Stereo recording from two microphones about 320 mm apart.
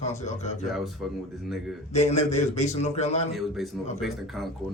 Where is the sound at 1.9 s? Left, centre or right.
Left.